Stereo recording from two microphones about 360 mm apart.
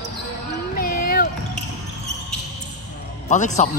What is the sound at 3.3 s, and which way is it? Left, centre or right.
Speech, centre.